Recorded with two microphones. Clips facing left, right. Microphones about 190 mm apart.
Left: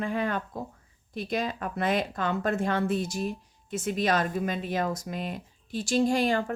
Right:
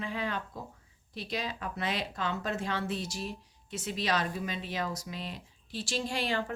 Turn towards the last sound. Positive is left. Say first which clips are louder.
# left 7 dB
turn(degrees=45)  # may be behind; listen again after turning